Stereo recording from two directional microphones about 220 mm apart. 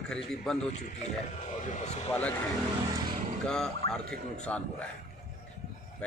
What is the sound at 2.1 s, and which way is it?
Speech, 5° left (ahead or behind).